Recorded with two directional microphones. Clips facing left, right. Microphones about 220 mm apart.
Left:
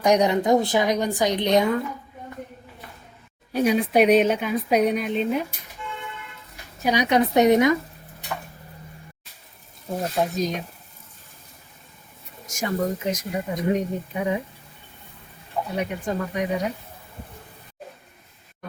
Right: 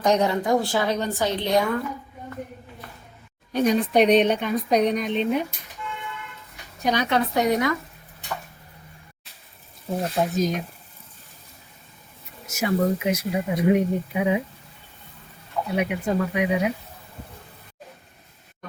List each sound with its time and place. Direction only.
0.0 s a woman's voice: 15° left (ahead or behind)
3.5 s a woman's voice: 10° left (ahead or behind)
6.7 s a woman's voice: 10° left (ahead or behind)
10.3 s speech: centre (ahead or behind)
12.5 s speech: 10° right (ahead or behind)
15.7 s speech: 10° right (ahead or behind)